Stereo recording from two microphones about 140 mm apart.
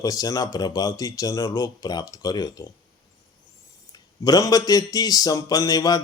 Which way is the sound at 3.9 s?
25° left (ahead or behind).